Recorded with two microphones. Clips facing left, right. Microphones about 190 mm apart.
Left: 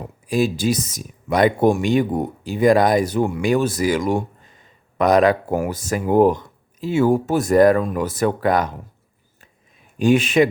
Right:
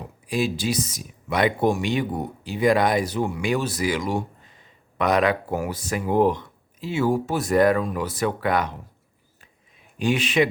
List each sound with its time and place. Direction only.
0.3 s speech: 45° left (ahead or behind)
10.0 s speech: 45° left (ahead or behind)